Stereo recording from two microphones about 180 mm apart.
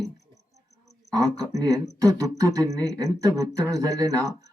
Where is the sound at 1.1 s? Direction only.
20° right (ahead or behind).